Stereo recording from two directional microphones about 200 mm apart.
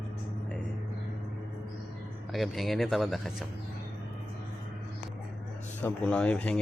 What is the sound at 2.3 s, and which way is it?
Speech, centre (ahead or behind).